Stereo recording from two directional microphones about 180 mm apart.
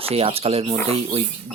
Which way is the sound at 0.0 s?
30° right (ahead or behind).